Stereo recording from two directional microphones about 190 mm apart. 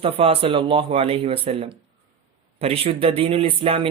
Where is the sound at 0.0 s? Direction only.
30° right (ahead or behind).